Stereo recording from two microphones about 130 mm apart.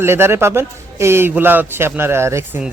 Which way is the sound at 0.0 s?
20° right (ahead or behind).